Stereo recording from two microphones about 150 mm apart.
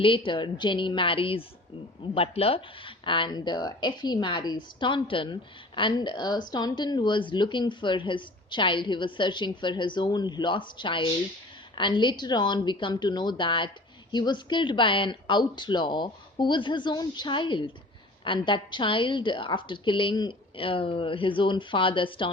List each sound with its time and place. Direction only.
0.0 s a woman's voice: 35° left (ahead or behind)